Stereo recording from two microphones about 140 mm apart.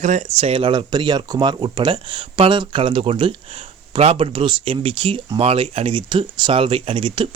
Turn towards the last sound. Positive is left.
turn(degrees=-35)  # may be behind; listen again after turning